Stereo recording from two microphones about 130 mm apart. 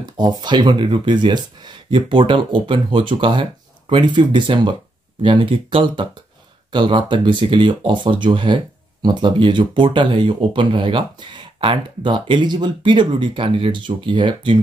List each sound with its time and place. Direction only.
0.0 s speech: 30° right (ahead or behind)